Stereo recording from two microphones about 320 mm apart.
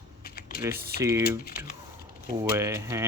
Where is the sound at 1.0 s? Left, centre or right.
Centre.